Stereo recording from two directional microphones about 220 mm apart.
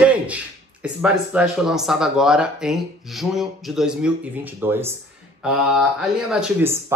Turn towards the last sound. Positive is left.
turn(degrees=-10)  # may be behind; listen again after turning